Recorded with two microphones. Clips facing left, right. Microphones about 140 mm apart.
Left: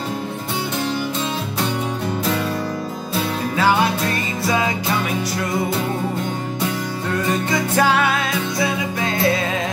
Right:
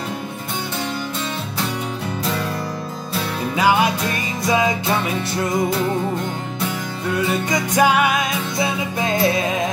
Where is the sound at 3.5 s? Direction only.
15° right (ahead or behind).